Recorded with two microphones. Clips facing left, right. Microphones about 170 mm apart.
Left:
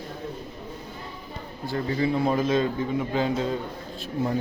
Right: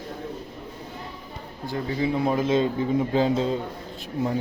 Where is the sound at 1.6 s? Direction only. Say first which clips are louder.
Left 1 dB; 15° right (ahead or behind).